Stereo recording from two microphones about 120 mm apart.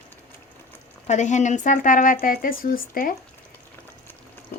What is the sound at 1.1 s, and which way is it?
Speech, 80° left.